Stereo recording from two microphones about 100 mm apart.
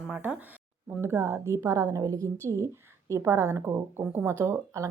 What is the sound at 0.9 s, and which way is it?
A woman's voice, 25° right (ahead or behind).